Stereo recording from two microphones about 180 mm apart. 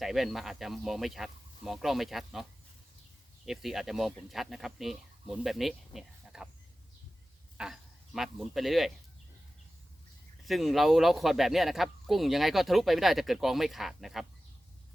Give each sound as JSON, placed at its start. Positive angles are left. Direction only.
{"t": 0.0, "sound": "speech", "side_deg": 0}
{"t": 7.6, "sound": "speech", "side_deg": 0}
{"t": 10.4, "sound": "speech", "side_deg": 0}